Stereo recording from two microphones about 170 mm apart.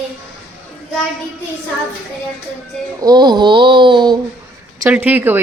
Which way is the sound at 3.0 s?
25° right (ahead or behind).